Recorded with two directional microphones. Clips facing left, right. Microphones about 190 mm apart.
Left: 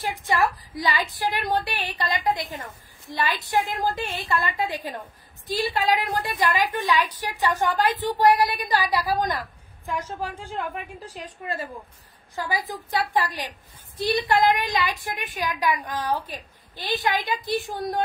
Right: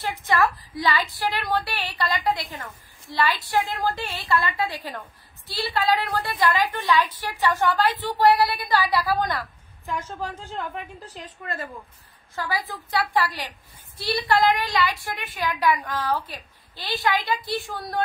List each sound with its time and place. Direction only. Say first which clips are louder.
0.8 s a woman's voice: right 1 dB; 20° left (ahead or behind)